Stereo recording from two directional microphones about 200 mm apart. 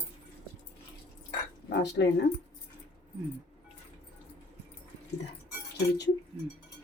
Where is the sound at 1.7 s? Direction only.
60° left (ahead or behind).